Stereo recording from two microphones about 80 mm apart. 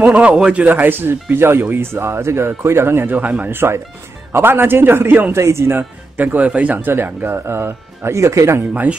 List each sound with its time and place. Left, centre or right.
0.0 s speech: centre
3.5 s speech: right
5.3 s speech: right